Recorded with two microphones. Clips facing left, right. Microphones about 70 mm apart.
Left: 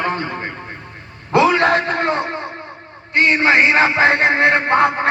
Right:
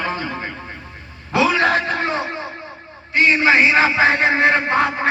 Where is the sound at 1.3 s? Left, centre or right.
Left.